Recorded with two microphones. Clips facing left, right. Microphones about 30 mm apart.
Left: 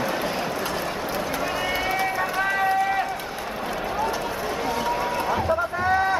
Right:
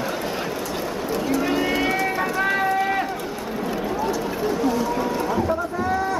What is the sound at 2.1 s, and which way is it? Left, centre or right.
Run, centre.